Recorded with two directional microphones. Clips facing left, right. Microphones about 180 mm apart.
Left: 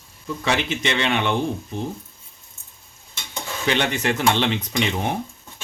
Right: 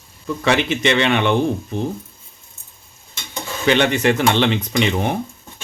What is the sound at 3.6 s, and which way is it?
Speech, 70° right (ahead or behind).